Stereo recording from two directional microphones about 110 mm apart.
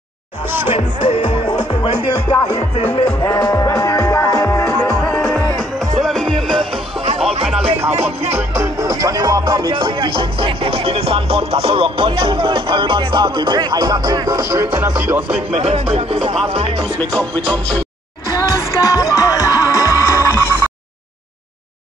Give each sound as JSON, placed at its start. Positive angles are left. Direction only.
{"t": 0.5, "sound": "music", "side_deg": -20}
{"t": 3.3, "sound": "music", "side_deg": 35}
{"t": 4.7, "sound": "music", "side_deg": 10}
{"t": 7.9, "sound": "music", "side_deg": -80}
{"t": 8.5, "sound": "music", "side_deg": -35}
{"t": 14.8, "sound": "speech", "side_deg": -20}
{"t": 15.5, "sound": "music", "side_deg": -80}
{"t": 17.1, "sound": "music", "side_deg": 10}
{"t": 18.5, "sound": "music", "side_deg": 30}